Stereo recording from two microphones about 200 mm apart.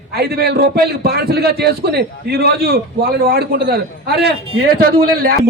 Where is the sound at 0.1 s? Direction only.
50° right (ahead or behind).